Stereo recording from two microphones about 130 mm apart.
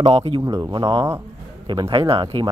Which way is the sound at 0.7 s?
40° right (ahead or behind).